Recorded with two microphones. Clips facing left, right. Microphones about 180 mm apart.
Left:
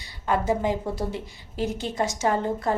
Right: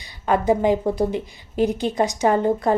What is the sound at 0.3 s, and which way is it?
A woman's voice, 20° right (ahead or behind).